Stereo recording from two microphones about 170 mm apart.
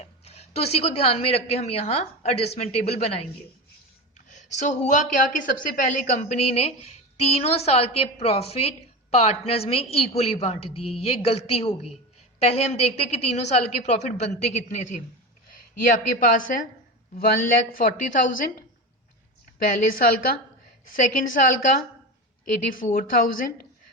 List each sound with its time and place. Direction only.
0.0 s a woman's voice: 35° left (ahead or behind)
4.5 s a woman's voice: 45° left (ahead or behind)
15.8 s a woman's voice: 55° left (ahead or behind)
19.5 s a woman's voice: 55° left (ahead or behind)